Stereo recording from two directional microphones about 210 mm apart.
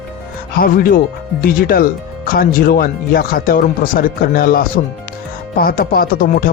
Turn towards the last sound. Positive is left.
turn(degrees=45)  # may be behind; listen again after turning